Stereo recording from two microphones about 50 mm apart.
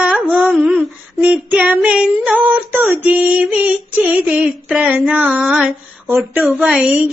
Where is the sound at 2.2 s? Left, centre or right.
Right.